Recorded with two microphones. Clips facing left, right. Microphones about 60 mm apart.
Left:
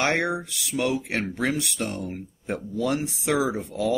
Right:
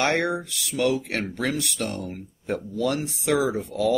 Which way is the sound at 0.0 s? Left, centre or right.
Centre.